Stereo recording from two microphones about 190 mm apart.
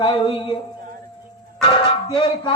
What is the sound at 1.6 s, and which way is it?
Music, 25° left (ahead or behind).